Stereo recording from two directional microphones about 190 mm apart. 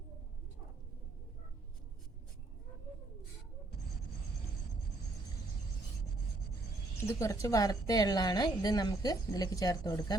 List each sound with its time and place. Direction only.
7.0 s a woman's voice: 15° left (ahead or behind)